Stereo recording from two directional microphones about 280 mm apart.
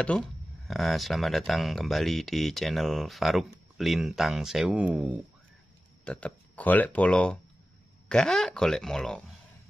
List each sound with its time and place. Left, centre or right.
0.7 s speech: centre